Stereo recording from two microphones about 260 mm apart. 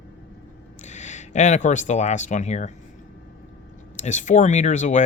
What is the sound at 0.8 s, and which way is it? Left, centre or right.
Speech, left.